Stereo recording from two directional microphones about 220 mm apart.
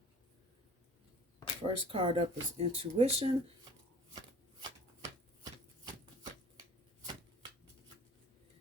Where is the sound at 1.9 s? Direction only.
25° right (ahead or behind).